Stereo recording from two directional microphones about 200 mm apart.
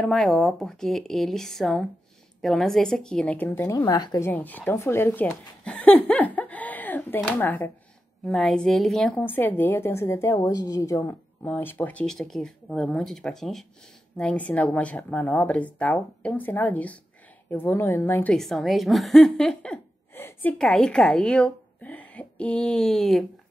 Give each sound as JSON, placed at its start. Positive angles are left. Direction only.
{"t": 0.0, "sound": "a woman's voice", "side_deg": 0}
{"t": 4.3, "sound": "a woman's voice", "side_deg": 10}